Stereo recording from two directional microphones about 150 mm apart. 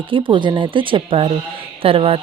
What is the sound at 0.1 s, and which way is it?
Speech, 35° right (ahead or behind).